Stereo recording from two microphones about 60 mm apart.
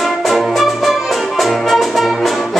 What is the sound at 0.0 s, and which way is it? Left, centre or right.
Music, centre.